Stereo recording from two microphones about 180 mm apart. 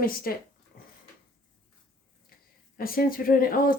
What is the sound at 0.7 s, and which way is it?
Dog, 50° left (ahead or behind).